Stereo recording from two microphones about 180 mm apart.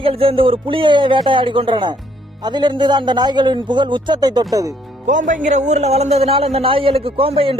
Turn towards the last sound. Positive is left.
turn(degrees=-30)  # may be behind; listen again after turning